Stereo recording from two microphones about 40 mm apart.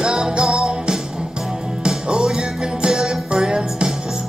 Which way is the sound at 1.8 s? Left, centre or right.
Right.